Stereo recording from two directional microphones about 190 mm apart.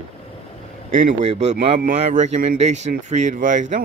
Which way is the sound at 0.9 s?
35° right (ahead or behind).